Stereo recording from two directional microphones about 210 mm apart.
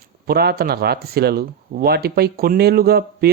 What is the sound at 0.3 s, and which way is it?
Speech, 50° right (ahead or behind).